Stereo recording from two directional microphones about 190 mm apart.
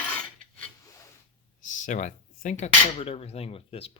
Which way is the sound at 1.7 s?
40° left (ahead or behind).